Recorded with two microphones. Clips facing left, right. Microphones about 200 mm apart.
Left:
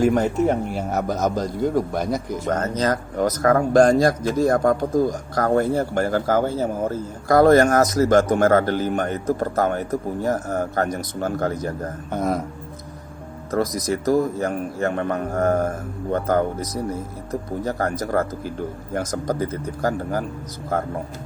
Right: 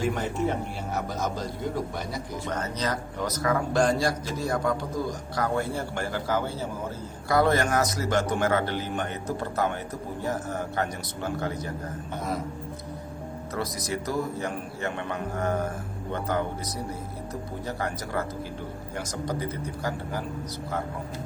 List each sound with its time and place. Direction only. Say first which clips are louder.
0.0 s speech: left 9 dB; 45° left (ahead or behind)
13.8 s speech: left 9 dB; 45° left (ahead or behind)